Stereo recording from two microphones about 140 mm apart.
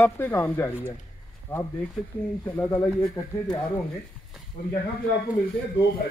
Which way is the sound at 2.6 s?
15° left (ahead or behind).